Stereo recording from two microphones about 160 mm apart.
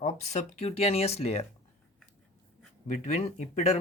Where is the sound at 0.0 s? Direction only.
45° left (ahead or behind).